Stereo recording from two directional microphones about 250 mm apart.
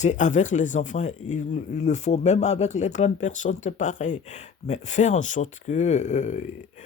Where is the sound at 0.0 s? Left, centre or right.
Left.